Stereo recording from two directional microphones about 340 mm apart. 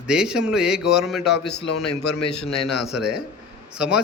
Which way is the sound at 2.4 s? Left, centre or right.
Centre.